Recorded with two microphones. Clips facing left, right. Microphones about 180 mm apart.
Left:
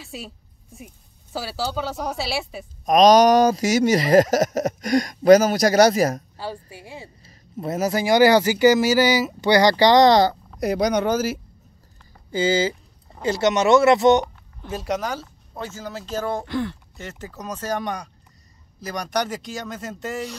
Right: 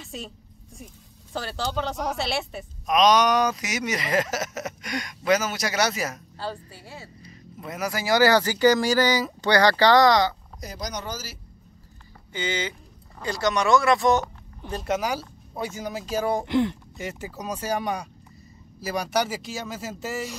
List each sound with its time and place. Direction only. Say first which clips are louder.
0.0 s a sound: left 1 dB; centre (ahead or behind)
0.7 s speech: left 2 dB; 5° left (ahead or behind)
2.9 s speech: left 6 dB; 40° left (ahead or behind)
6.3 s speech: left 1 dB; 10° left (ahead or behind)
7.2 s music: left 10 dB; 35° left (ahead or behind)
7.9 s speech: left 4 dB; 20° left (ahead or behind)
10.6 s speech: left 14 dB; 65° left (ahead or behind)
12.3 s speech: left 9 dB; 30° left (ahead or behind)
14.7 s speech: left 1 dB; 5° left (ahead or behind)
15.0 s speech: right 1 dB; 10° right (ahead or behind)